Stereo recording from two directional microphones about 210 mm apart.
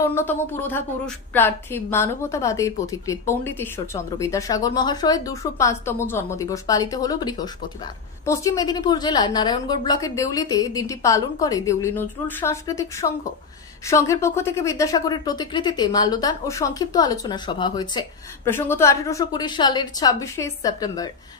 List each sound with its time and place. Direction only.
0.0 s a woman's voice: 10° left (ahead or behind)